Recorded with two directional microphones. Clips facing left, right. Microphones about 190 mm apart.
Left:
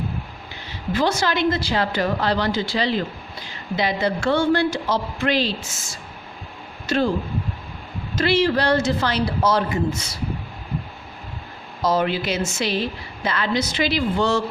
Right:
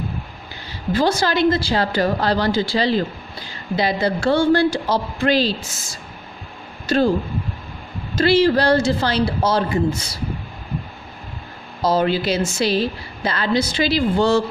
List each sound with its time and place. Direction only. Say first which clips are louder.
0.7 s a woman's voice: right 3 dB; 35° right (ahead or behind)
8.1 s a woman's voice: right 4 dB; 35° right (ahead or behind)
11.8 s a woman's voice: right 3 dB; 30° right (ahead or behind)